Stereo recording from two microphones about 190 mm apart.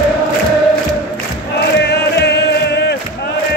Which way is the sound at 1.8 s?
60° left (ahead or behind).